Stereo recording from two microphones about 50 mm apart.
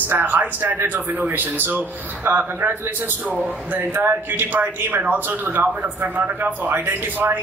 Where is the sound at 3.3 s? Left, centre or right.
Right.